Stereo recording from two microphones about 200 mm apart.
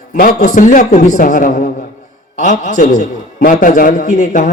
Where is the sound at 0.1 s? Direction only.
40° left (ahead or behind).